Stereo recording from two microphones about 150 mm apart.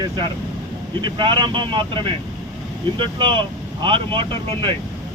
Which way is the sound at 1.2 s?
30° right (ahead or behind).